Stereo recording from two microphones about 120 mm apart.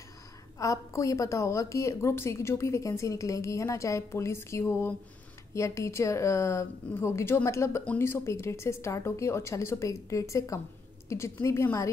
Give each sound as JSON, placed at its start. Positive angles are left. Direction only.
{"t": 0.6, "sound": "a woman's voice", "side_deg": 25}